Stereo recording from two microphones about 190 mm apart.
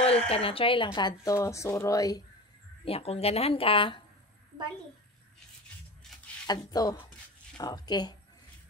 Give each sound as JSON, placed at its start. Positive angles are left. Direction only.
{"t": 0.0, "sound": "speech", "side_deg": 30}
{"t": 2.8, "sound": "speech", "side_deg": 30}
{"t": 6.4, "sound": "speech", "side_deg": 20}